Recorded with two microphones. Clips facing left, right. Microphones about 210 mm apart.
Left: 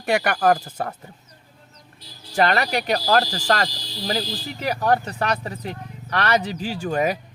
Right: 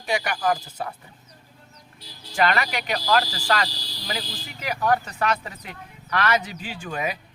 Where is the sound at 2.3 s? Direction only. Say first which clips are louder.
Left 3 dB; 35° left (ahead or behind).